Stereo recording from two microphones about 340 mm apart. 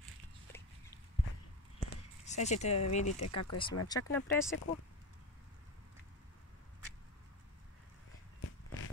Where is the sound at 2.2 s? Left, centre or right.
Centre.